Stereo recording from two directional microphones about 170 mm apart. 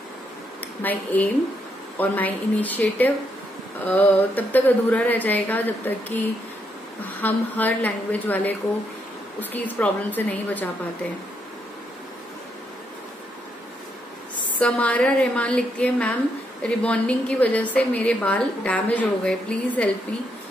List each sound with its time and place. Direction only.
0.8 s a woman's voice: 10° left (ahead or behind)
14.6 s a woman's voice: 5° left (ahead or behind)